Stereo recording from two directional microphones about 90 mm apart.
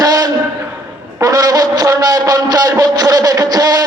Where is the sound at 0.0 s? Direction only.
45° right (ahead or behind).